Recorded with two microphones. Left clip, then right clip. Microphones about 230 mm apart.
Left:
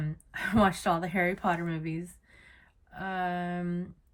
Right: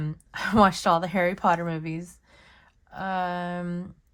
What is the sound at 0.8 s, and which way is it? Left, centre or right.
Speech, right.